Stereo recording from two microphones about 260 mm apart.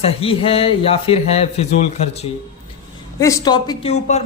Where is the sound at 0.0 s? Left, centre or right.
Left.